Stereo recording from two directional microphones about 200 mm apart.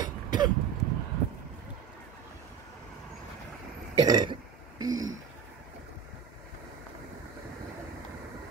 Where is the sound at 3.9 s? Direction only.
20° right (ahead or behind).